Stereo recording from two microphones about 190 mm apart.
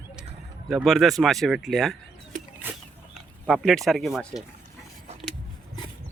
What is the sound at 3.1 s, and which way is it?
Speech, centre (ahead or behind).